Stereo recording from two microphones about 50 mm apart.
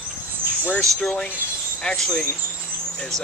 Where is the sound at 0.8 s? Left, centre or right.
Centre.